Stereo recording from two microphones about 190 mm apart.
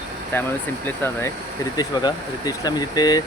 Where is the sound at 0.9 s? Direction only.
10° left (ahead or behind).